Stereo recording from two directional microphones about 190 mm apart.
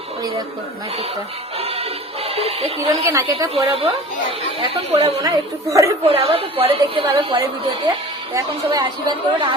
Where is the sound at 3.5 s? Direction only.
30° right (ahead or behind).